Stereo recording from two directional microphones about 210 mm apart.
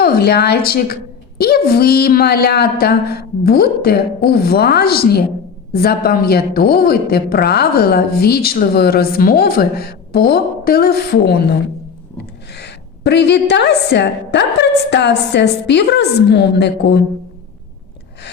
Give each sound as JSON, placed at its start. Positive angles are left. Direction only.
{"t": 0.0, "sound": "a woman's voice", "side_deg": 45}